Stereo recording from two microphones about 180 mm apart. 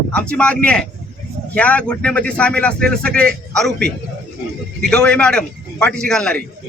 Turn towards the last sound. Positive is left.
turn(degrees=5)  # may be behind; listen again after turning